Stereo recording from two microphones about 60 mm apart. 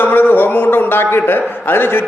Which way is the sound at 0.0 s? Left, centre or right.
Left.